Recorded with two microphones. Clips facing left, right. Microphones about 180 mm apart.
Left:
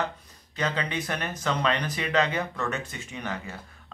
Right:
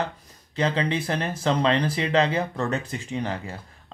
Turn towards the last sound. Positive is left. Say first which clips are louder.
# right 5 dB
turn(degrees=-30)  # may be behind; listen again after turning